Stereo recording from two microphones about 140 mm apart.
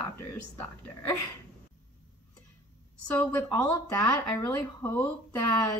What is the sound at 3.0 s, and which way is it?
Speech, 10° left (ahead or behind).